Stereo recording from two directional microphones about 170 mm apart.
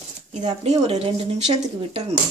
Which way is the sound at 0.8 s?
35° right (ahead or behind).